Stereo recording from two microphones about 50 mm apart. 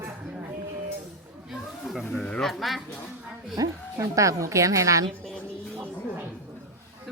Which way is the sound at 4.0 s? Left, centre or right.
Right.